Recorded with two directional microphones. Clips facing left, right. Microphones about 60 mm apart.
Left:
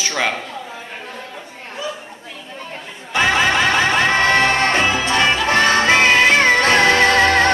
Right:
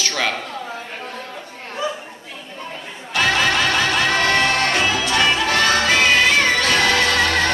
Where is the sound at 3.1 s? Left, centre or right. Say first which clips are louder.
Left 2 dB; left.